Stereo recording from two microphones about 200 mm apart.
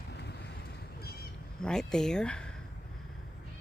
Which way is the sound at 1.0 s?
50° left (ahead or behind).